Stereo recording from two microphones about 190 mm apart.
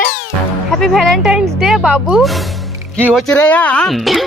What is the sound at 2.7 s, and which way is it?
Music, 10° right (ahead or behind).